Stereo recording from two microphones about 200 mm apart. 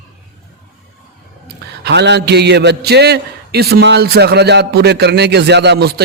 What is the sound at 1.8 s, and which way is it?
A man's voice, 60° right (ahead or behind).